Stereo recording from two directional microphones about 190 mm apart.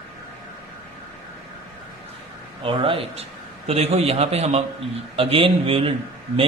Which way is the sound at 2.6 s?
30° right (ahead or behind).